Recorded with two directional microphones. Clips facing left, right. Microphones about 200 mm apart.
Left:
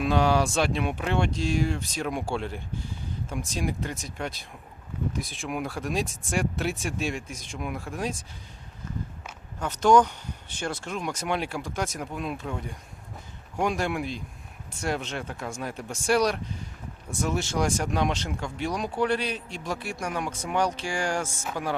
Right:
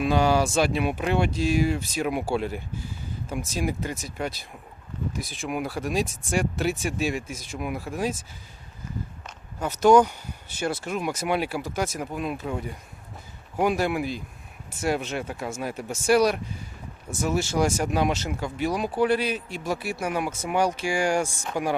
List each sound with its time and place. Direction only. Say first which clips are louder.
0.0 s speech: right 2 dB; centre (ahead or behind)
9.6 s speech: right 3 dB; 10° right (ahead or behind)